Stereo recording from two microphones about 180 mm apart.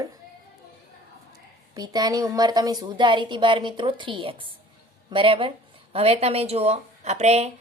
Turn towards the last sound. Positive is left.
turn(degrees=-35)  # may be behind; listen again after turning